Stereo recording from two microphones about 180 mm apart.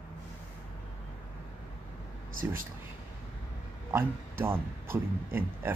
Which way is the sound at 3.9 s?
15° right (ahead or behind).